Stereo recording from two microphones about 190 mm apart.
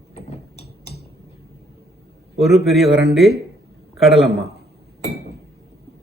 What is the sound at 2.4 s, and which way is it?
Speech, centre (ahead or behind).